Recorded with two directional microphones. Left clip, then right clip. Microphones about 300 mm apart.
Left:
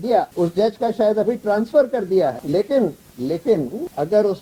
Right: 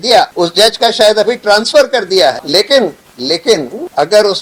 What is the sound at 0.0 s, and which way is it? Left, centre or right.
Speech, centre.